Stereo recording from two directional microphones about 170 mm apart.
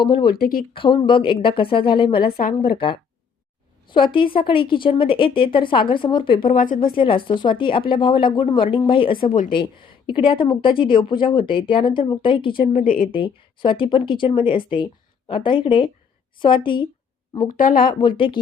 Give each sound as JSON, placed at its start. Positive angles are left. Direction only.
{"t": 0.0, "sound": "a woman's voice", "side_deg": 25}
{"t": 0.3, "sound": "a woman's voice", "side_deg": 60}
{"t": 0.7, "sound": "a woman's voice", "side_deg": 30}
{"t": 2.2, "sound": "a woman's voice", "side_deg": 55}
{"t": 2.6, "sound": "a woman's voice", "side_deg": 30}
{"t": 6.4, "sound": "speech", "side_deg": 55}
{"t": 6.7, "sound": "a woman's voice", "side_deg": 30}
{"t": 9.2, "sound": "speech", "side_deg": 50}
{"t": 10.1, "sound": "a woman's voice", "side_deg": 30}
{"t": 12.5, "sound": "a woman's voice", "side_deg": 55}
{"t": 13.1, "sound": "a woman's voice", "side_deg": 30}
{"t": 17.6, "sound": "speech", "side_deg": 55}